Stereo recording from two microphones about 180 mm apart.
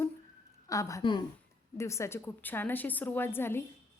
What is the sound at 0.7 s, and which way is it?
Speech, 15° left (ahead or behind).